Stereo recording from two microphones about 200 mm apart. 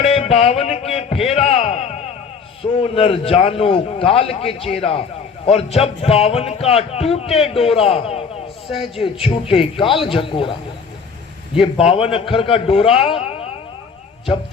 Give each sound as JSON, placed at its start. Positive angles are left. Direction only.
{"t": 0.0, "sound": "a sound", "side_deg": 30}
{"t": 2.6, "sound": "speech", "side_deg": 25}
{"t": 11.6, "sound": "speech", "side_deg": 25}